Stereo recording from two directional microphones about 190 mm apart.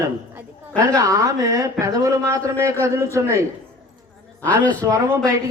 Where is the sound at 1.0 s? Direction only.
15° right (ahead or behind).